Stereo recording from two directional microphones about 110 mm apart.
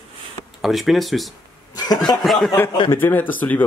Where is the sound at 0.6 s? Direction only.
Centre (ahead or behind).